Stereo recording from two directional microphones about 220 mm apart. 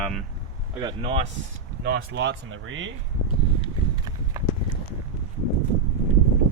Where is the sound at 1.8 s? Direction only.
50° right (ahead or behind).